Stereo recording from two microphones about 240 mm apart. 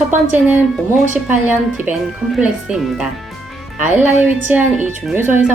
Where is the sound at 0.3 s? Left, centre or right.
Centre.